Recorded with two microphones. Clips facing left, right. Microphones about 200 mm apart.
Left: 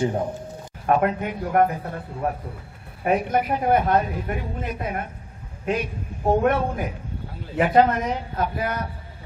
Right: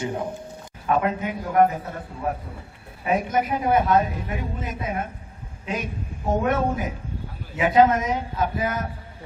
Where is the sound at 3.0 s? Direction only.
55° left (ahead or behind).